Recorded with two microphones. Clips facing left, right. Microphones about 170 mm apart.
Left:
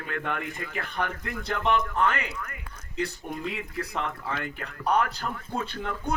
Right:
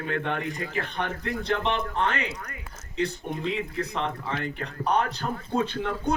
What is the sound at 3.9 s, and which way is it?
A man's voice, 30° right (ahead or behind).